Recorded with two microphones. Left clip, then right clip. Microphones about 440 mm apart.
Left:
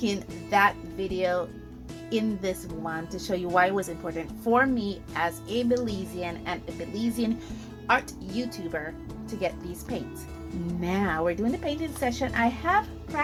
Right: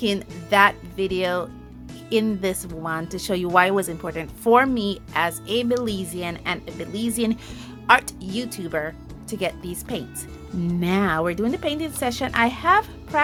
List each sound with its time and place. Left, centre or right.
0.0 s speech: centre